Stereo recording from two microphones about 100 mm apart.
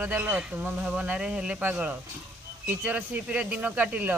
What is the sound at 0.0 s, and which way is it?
Speech, 20° right (ahead or behind).